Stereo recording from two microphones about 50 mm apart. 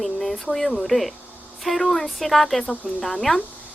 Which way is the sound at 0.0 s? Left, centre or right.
Centre.